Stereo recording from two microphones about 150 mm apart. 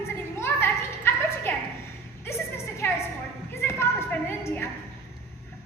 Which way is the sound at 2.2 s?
15° left (ahead or behind).